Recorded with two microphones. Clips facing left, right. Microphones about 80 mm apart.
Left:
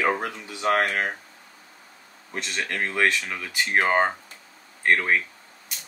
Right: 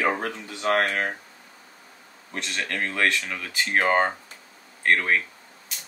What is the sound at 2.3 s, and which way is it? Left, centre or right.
Speech, centre.